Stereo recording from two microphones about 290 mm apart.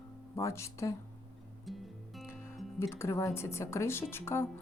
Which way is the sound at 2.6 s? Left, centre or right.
Centre.